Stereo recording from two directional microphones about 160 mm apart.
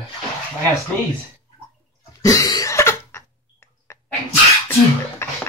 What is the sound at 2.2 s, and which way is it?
Throat clearing, 20° left (ahead or behind).